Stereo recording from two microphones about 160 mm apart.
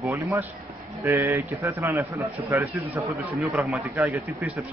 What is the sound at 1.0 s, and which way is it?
Speech, 15° right (ahead or behind).